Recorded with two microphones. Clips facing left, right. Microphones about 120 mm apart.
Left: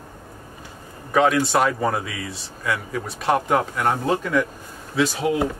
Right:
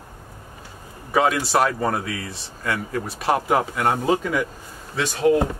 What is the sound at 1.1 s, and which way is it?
A man's voice, 5° right (ahead or behind).